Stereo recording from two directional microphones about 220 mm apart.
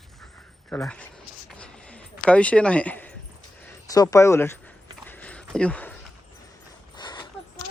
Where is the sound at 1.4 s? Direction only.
5° left (ahead or behind).